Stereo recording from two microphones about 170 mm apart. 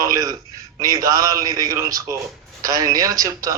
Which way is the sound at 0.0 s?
20° right (ahead or behind).